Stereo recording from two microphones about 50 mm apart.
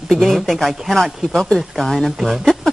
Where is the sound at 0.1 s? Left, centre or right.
Centre.